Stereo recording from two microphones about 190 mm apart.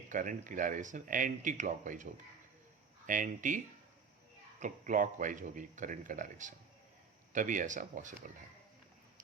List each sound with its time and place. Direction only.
0.1 s speech: 45° right (ahead or behind)
3.1 s speech: 45° right (ahead or behind)
4.6 s speech: 45° right (ahead or behind)